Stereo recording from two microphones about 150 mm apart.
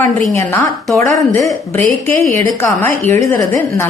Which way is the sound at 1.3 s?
20° left (ahead or behind).